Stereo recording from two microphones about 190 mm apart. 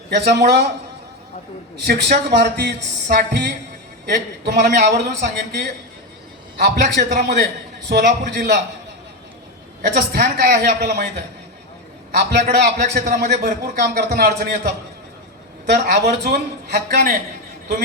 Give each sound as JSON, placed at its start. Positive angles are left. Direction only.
{"t": 0.1, "sound": "a man's voice", "side_deg": -60}
{"t": 1.8, "sound": "a man's voice", "side_deg": -55}
{"t": 10.1, "sound": "a man's voice", "side_deg": -55}
{"t": 12.1, "sound": "a man's voice", "side_deg": -60}